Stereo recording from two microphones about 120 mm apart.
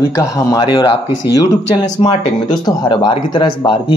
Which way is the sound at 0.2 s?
35° left (ahead or behind).